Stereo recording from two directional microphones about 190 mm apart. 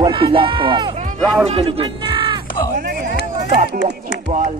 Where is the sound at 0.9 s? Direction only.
40° right (ahead or behind).